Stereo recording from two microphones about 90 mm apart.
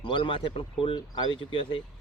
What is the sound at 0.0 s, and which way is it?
Speech, 65° left (ahead or behind).